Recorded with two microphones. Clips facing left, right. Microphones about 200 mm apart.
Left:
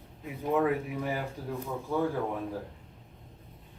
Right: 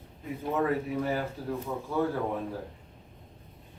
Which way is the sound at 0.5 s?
15° left (ahead or behind).